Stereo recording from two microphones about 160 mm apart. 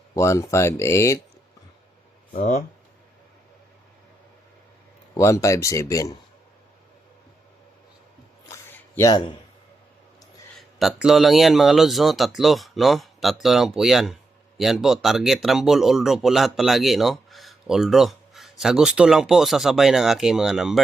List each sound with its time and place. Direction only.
0.1 s speech: 20° left (ahead or behind)
2.3 s speech: 60° left (ahead or behind)
5.1 s speech: 20° left (ahead or behind)
8.4 s a sound: 20° left (ahead or behind)
10.6 s speech: centre (ahead or behind)